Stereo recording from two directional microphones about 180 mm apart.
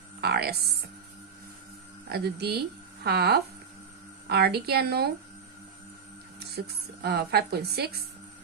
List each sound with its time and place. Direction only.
0.2 s speech: 60° right (ahead or behind)
2.0 s a woman's voice: 60° right (ahead or behind)
6.5 s a woman's voice: 65° right (ahead or behind)